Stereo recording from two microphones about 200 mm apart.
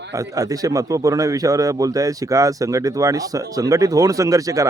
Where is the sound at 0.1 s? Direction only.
15° right (ahead or behind).